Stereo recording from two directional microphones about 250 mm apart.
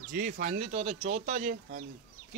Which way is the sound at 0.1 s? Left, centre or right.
Right.